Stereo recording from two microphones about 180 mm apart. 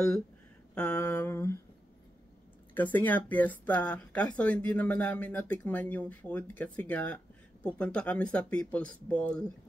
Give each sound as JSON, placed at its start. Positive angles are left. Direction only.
{"t": 0.7, "sound": "speech", "side_deg": 10}
{"t": 2.7, "sound": "speech", "side_deg": 10}